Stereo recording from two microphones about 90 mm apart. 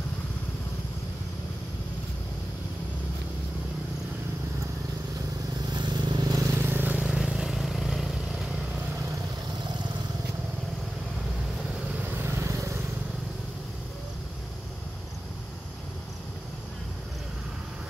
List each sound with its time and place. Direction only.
5.6 s vehicle: 50° right (ahead or behind)
6.6 s vehicle: 20° right (ahead or behind)
7.0 s vehicle: 5° right (ahead or behind)
12.2 s vehicle: 30° right (ahead or behind)